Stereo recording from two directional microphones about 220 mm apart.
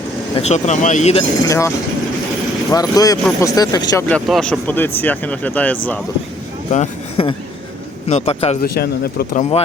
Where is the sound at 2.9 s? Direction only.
15° left (ahead or behind).